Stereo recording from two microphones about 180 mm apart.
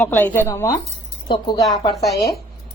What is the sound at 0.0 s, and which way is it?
Speech, 10° left (ahead or behind).